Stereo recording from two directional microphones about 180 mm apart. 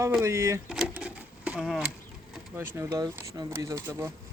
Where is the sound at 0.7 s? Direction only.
5° right (ahead or behind).